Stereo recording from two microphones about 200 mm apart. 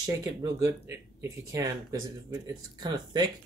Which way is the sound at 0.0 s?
20° right (ahead or behind).